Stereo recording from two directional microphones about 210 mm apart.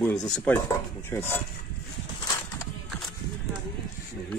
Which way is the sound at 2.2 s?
15° left (ahead or behind).